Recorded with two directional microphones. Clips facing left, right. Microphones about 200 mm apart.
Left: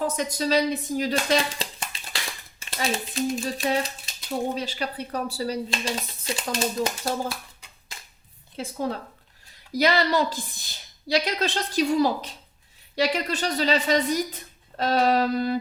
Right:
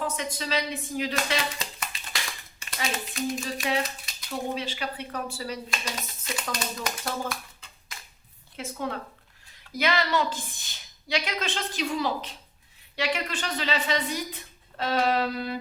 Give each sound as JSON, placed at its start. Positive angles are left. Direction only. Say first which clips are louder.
{"t": 0.0, "sound": "speech", "louder": "left 5 dB", "side_deg": 40}
{"t": 8.5, "sound": "speech", "louder": "left 4 dB", "side_deg": 35}